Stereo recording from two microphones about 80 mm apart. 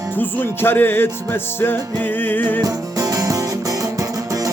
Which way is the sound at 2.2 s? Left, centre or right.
Left.